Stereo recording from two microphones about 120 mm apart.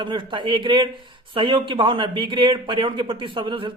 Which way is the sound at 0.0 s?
45° right (ahead or behind).